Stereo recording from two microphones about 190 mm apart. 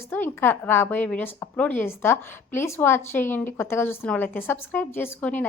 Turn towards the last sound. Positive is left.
turn(degrees=10)  # may be behind; listen again after turning